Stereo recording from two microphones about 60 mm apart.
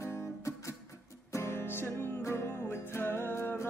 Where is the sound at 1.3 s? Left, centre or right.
Left.